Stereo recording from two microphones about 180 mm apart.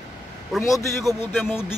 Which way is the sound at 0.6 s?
15° left (ahead or behind).